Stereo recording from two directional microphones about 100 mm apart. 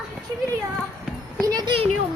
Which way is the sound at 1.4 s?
40° right (ahead or behind).